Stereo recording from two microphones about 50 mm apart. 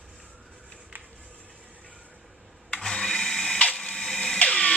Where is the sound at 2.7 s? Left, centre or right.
Centre.